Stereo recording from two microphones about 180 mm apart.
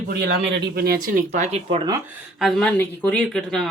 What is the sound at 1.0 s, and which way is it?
Speech, 45° right (ahead or behind).